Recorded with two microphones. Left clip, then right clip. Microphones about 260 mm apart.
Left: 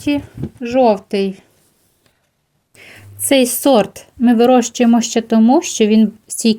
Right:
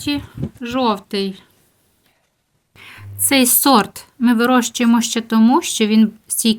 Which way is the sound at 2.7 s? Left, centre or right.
Centre.